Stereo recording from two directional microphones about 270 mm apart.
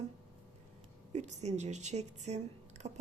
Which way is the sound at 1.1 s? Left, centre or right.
Right.